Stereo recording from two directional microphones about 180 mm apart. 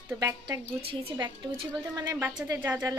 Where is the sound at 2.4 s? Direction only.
10° right (ahead or behind).